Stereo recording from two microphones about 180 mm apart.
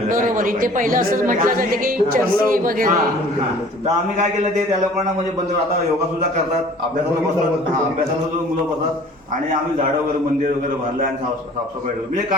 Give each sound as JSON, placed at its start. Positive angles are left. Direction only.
{"t": 0.1, "sound": "a woman's voice", "side_deg": -50}